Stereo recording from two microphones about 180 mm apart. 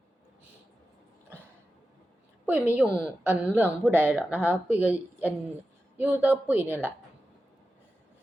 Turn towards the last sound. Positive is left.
turn(degrees=-10)  # may be behind; listen again after turning